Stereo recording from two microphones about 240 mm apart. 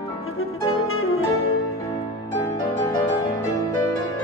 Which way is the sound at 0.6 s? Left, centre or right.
Left.